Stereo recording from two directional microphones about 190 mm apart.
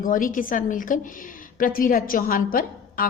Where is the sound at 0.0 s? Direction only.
45° left (ahead or behind).